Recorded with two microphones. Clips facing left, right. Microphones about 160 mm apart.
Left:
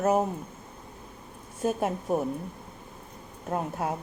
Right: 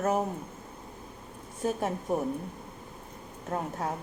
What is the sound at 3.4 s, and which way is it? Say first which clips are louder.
Speech: left 3 dB; 15° left (ahead or behind).